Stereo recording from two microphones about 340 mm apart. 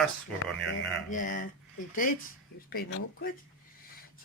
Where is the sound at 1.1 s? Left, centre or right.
Left.